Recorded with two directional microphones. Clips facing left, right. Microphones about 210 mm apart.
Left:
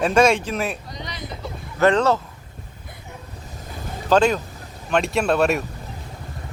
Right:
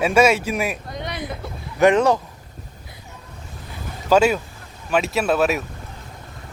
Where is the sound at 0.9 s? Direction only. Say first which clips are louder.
Right 5 dB; 55° right (ahead or behind).